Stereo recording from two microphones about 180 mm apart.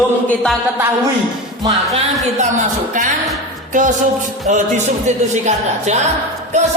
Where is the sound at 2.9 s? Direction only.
45° right (ahead or behind).